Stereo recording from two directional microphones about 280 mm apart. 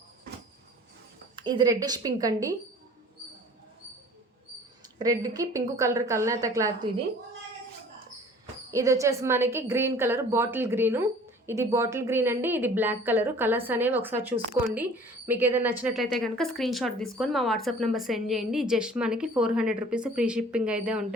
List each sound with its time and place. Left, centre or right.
1.4 s a woman's voice: centre
4.9 s a woman's voice: centre
8.7 s a woman's voice: centre